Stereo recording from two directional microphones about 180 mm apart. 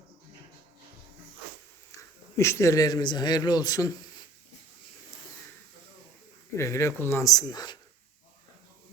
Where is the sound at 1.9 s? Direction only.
15° left (ahead or behind).